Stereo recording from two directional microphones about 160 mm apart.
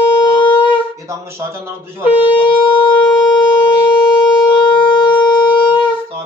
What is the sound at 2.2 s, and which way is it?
Shofar, 30° left (ahead or behind).